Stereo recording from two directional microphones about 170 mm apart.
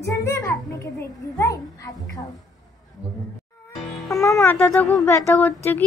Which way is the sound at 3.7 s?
Centre (ahead or behind).